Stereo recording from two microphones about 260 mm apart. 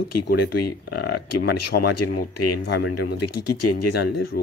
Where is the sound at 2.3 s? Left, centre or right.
Left.